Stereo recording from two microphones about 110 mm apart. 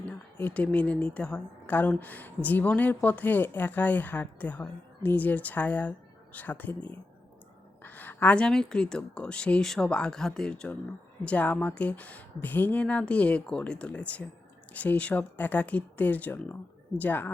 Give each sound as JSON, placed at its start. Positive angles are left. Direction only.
{"t": 0.0, "sound": "a woman's voice", "side_deg": 15}